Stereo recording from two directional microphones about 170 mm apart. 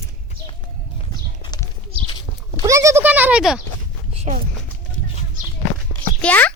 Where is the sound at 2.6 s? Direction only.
20° right (ahead or behind).